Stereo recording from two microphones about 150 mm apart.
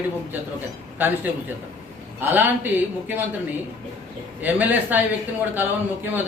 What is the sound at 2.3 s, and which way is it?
Speech, 10° right (ahead or behind).